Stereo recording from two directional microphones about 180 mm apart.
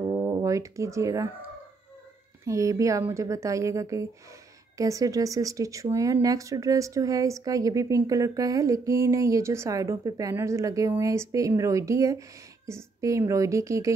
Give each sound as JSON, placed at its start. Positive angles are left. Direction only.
{"t": 0.0, "sound": "brass instrument", "side_deg": -15}
{"t": 2.4, "sound": "a woman's voice", "side_deg": -15}